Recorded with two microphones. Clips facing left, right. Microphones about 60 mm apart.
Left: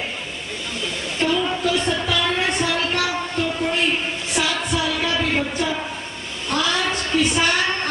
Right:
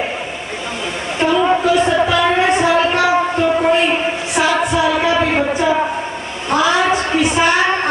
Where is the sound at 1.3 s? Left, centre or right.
Right.